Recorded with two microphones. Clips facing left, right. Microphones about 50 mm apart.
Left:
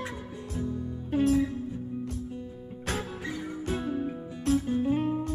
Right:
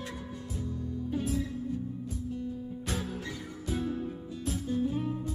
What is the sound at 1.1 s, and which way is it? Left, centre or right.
Music, left.